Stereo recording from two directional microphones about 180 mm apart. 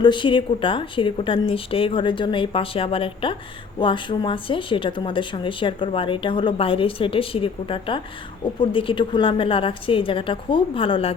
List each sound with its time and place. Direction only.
0.0 s speech: 25° left (ahead or behind)